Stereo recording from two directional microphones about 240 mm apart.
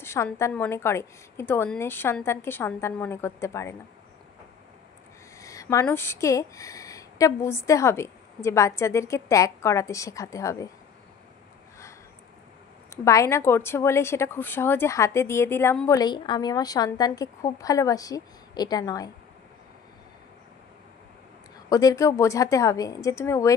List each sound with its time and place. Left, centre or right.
0.0 s speech: centre
5.4 s speech: centre
12.9 s speech: centre
21.6 s speech: centre